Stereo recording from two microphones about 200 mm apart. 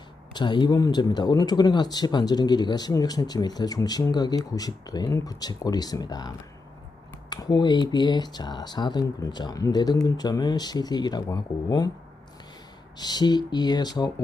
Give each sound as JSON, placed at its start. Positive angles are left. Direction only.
{"t": 0.3, "sound": "speech", "side_deg": 20}
{"t": 13.0, "sound": "speech", "side_deg": 20}